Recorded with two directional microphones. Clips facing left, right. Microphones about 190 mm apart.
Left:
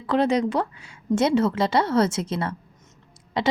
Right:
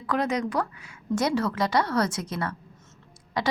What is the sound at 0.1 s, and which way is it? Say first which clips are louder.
Speech: left 5 dB; 30° left (ahead or behind).